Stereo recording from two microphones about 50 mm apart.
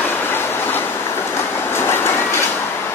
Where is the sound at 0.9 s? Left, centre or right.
Left.